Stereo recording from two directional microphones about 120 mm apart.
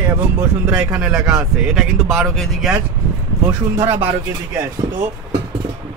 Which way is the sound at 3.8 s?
20° right (ahead or behind).